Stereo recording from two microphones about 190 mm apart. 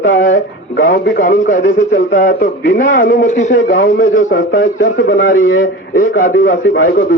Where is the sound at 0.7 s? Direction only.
50° left (ahead or behind).